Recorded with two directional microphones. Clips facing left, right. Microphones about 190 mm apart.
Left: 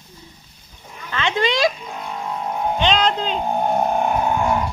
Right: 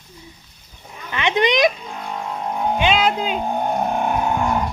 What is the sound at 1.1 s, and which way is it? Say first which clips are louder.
Speech: right 2 dB; 20° right (ahead or behind).